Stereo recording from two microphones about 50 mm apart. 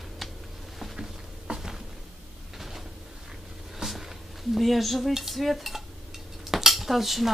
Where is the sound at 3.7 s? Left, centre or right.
Centre.